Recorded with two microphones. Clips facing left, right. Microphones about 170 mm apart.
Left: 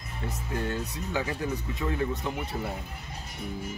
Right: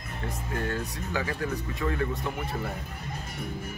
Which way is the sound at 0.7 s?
20° left (ahead or behind).